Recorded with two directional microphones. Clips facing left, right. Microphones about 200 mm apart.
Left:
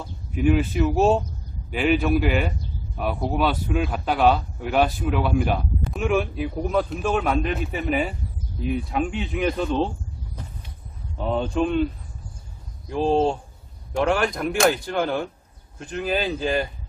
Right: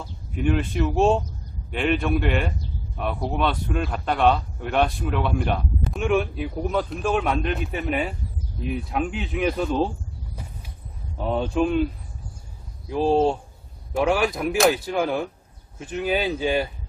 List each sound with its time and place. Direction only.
0.0 s a man's voice: 5° left (ahead or behind)
11.1 s a man's voice: 5° right (ahead or behind)